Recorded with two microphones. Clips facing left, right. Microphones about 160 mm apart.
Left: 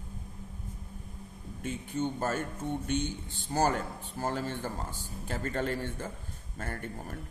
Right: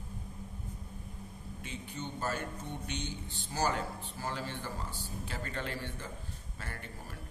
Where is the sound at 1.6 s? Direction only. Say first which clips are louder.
Left 10 dB; 50° left (ahead or behind).